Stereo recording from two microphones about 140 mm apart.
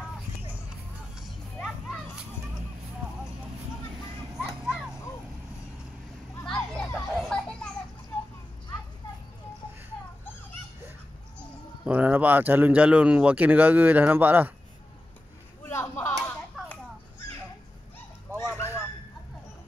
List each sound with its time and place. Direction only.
0.5 s music: 5° right (ahead or behind)
4.4 s music: 5° right (ahead or behind)
6.4 s children playing: 5° left (ahead or behind)
11.3 s speech: 10° right (ahead or behind)
15.6 s a sound: 20° left (ahead or behind)
18.3 s a sound: 20° left (ahead or behind)